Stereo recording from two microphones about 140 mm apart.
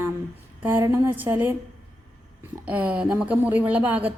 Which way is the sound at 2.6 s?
10° right (ahead or behind).